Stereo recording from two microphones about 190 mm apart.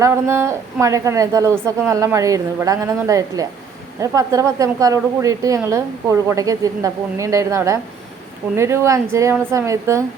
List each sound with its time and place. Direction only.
0.0 s a woman's voice: 15° right (ahead or behind)